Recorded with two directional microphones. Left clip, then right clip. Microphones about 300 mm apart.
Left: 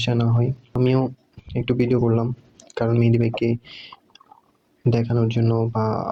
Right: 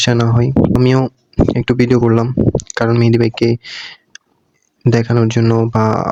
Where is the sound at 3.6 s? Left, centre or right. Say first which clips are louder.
Right 11 dB; right.